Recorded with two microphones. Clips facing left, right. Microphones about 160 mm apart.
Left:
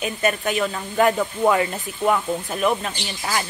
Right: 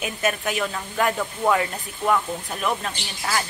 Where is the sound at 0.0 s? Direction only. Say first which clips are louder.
Left 3 dB; 5° right (ahead or behind).